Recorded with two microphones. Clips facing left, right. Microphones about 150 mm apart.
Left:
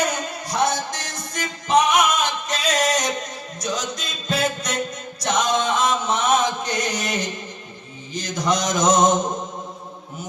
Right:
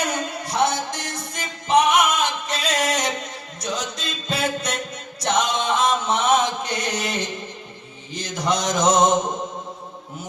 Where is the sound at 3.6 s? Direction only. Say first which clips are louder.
Left 1 dB; 30° right (ahead or behind).